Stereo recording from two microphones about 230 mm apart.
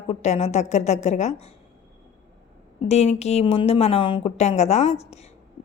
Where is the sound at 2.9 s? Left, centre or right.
Left.